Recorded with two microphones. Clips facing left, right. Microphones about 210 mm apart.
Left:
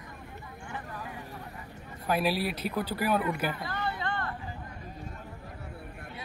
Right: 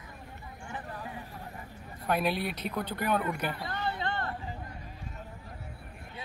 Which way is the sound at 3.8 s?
25° right (ahead or behind).